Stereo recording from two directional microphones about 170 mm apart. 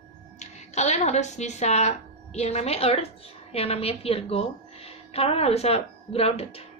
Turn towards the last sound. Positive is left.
turn(degrees=35)  # may be behind; listen again after turning